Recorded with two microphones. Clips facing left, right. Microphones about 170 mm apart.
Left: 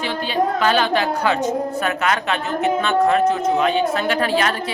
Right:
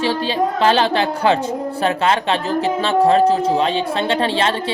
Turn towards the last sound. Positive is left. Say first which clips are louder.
# right 1 dB
turn(degrees=-30)  # may be behind; listen again after turning